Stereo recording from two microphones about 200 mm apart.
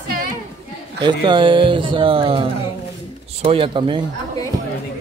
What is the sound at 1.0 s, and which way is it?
Speech, 25° right (ahead or behind).